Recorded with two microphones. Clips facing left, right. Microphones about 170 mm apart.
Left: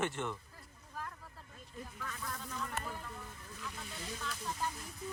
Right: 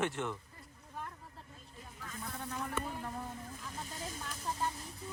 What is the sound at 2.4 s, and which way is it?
Vehicle, 60° right (ahead or behind).